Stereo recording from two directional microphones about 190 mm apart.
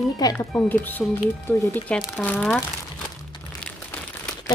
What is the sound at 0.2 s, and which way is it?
Speech, 20° left (ahead or behind).